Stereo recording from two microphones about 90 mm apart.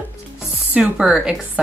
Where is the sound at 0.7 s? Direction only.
10° right (ahead or behind).